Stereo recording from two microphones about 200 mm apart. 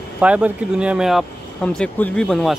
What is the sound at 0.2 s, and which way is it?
Speech, 5° right (ahead or behind).